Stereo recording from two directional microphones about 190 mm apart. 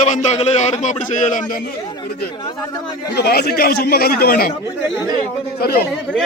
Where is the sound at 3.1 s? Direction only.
55° left (ahead or behind).